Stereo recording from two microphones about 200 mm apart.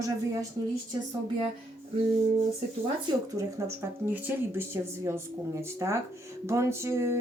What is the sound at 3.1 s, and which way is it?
Speech, 15° right (ahead or behind).